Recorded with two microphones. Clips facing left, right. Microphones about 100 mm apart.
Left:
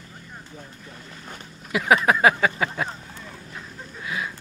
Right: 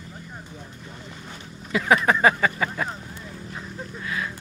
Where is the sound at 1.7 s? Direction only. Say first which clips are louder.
Left 1 dB; 15° left (ahead or behind).